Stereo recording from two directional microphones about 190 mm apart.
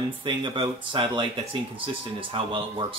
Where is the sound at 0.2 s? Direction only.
25° right (ahead or behind).